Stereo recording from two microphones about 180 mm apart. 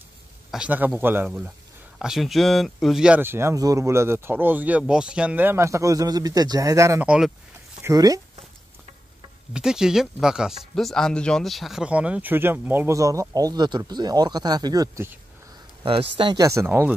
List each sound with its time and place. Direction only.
0.5 s speech: 5° right (ahead or behind)
7.8 s speech: 20° right (ahead or behind)
9.5 s speech: 5° right (ahead or behind)
15.8 s speech: 30° right (ahead or behind); by 16.9 s 15° right (ahead or behind)